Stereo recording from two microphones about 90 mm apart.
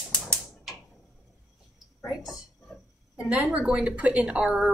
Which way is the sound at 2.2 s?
Centre (ahead or behind).